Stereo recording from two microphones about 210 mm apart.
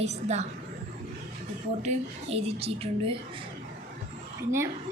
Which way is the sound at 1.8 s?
30° right (ahead or behind).